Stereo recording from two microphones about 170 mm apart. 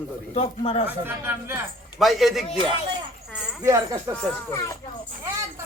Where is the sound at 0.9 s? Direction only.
10° right (ahead or behind).